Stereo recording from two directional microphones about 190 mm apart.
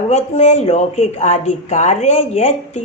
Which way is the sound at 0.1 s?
35° left (ahead or behind).